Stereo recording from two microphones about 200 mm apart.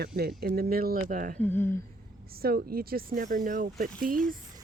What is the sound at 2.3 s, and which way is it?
Speech, 50° right (ahead or behind).